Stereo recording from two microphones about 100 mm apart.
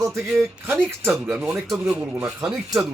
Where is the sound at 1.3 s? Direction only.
15° right (ahead or behind).